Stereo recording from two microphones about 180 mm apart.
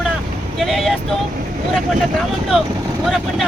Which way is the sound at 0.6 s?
Centre (ahead or behind).